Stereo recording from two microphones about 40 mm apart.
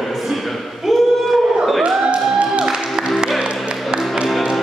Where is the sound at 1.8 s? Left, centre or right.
Right.